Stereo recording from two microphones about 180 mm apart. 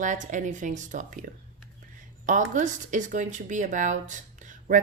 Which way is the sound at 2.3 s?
40° right (ahead or behind).